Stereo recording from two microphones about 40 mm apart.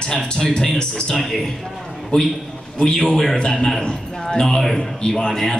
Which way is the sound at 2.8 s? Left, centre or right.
Centre.